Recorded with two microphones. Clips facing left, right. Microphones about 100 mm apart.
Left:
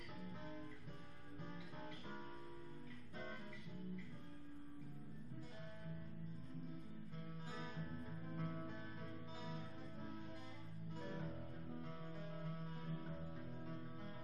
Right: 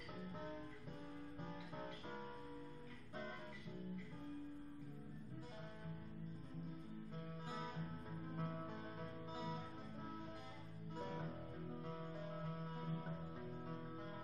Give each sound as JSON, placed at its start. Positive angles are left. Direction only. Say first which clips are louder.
{"t": 7.4, "sound": "music", "louder": "right 2 dB", "side_deg": -20}
{"t": 11.7, "sound": "music", "louder": "right 2 dB", "side_deg": -20}